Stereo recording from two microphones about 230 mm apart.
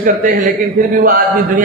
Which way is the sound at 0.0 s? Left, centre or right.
Right.